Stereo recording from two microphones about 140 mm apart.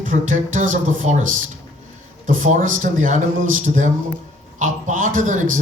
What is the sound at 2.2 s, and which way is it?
Speech, 65° right (ahead or behind).